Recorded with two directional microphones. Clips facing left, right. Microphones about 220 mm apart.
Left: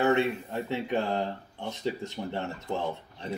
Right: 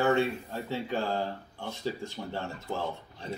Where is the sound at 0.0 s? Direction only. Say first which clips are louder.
Left 1 dB; 20° left (ahead or behind).